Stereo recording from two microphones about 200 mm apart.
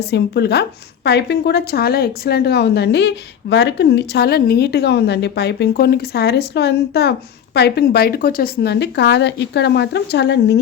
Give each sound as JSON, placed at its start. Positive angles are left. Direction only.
{"t": 0.1, "sound": "a woman's voice", "side_deg": 55}